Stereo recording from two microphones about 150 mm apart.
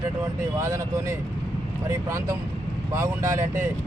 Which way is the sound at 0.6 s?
20° right (ahead or behind).